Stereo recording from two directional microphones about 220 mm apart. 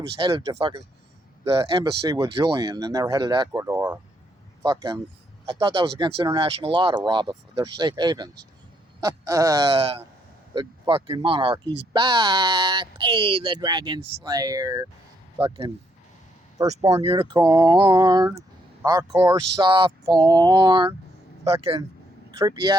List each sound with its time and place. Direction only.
0.2 s speech: 20° right (ahead or behind)
9.7 s speech: 25° right (ahead or behind)